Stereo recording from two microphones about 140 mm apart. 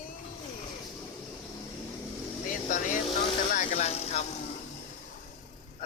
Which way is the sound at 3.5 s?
50° left (ahead or behind).